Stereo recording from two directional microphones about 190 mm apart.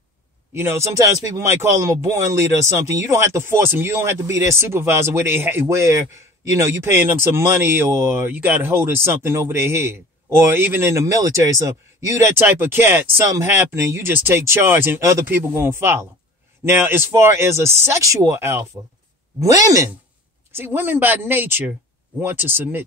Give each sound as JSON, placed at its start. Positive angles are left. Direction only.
{"t": 0.6, "sound": "speech", "side_deg": -15}